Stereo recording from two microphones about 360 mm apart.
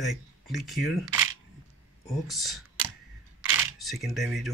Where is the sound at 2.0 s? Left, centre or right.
Centre.